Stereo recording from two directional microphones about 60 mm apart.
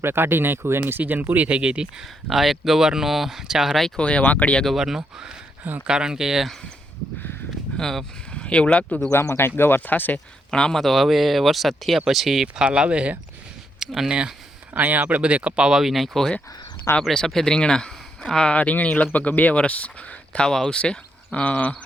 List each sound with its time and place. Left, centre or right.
0.0 s speech: right; by 2.0 s centre
2.3 s speech: centre
3.9 s speech: centre
4.6 s speech: centre
7.8 s speech: centre
8.3 s speech: centre
9.6 s speech: left
10.5 s speech: centre
12.6 s speech: centre
14.7 s speech: right; by 20.5 s centre
20.5 s speech: centre